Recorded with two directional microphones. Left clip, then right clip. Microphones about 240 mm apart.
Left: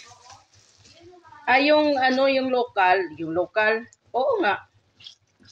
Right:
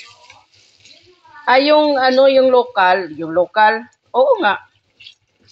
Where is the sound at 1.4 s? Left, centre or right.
Centre.